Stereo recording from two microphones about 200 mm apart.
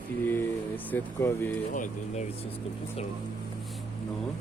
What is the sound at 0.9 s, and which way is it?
Speech, 10° left (ahead or behind).